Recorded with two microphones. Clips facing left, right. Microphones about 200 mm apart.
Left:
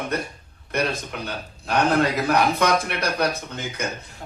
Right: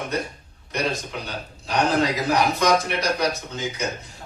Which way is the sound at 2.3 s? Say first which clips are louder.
Right 2 dB; 60° left (ahead or behind).